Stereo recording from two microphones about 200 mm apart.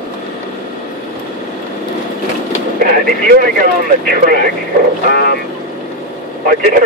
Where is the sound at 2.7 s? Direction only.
45° right (ahead or behind).